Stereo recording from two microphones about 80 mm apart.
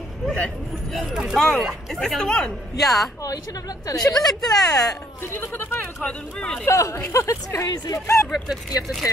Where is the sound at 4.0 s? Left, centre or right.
Left.